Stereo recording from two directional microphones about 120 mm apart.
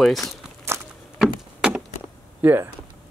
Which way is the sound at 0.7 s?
20° right (ahead or behind).